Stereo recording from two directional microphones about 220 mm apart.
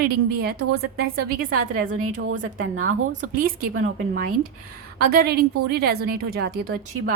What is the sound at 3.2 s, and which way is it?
Speech, 40° right (ahead or behind).